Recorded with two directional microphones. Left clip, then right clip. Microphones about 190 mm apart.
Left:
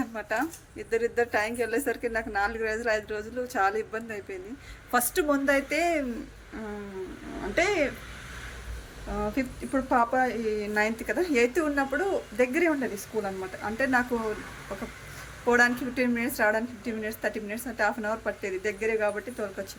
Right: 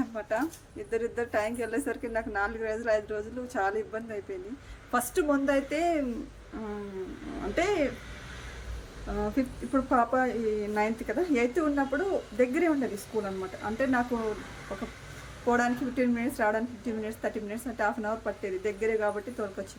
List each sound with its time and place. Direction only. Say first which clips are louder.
0.0 s a woman's voice: left 1 dB; centre (ahead or behind)
7.5 s speech: left 2 dB; 10° right (ahead or behind)
9.1 s a woman's voice: left 1 dB; 5° right (ahead or behind)
15.4 s a woman's voice: left 4 dB; 5° right (ahead or behind)